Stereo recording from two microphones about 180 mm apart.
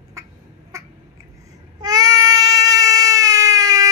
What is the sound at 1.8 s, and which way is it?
Baby cry, 20° right (ahead or behind).